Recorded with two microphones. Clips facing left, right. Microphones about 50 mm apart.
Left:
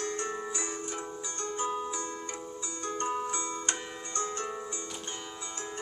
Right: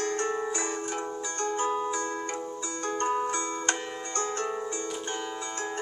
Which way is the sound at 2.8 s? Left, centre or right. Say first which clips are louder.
Right 4 dB; right.